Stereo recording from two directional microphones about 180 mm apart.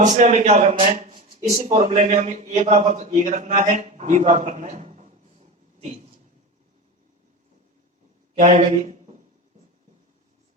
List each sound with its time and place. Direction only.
0.0 s speech: 40° right (ahead or behind)
8.4 s speech: 40° right (ahead or behind)